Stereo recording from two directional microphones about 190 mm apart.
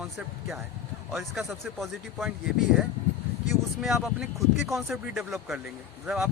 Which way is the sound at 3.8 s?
Centre (ahead or behind).